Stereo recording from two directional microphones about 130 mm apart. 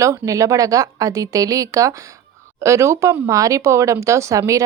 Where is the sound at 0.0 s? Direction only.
25° right (ahead or behind).